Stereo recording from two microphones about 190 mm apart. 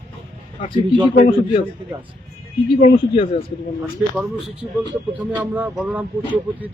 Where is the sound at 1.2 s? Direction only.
30° left (ahead or behind).